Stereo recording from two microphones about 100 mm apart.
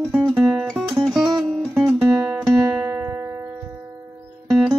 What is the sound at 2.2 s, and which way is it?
Music, 20° right (ahead or behind).